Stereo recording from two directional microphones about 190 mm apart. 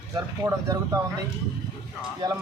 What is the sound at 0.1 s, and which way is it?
Speech, 20° right (ahead or behind).